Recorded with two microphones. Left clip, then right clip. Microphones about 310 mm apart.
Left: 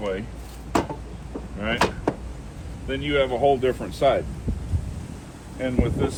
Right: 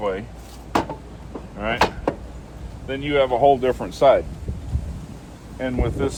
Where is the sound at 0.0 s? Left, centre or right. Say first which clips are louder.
Right 3 dB; centre.